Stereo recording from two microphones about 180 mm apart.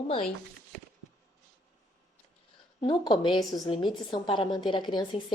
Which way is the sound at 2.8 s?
25° left (ahead or behind).